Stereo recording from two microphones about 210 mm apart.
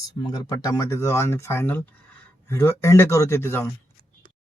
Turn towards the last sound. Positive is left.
turn(degrees=10)  # may be behind; listen again after turning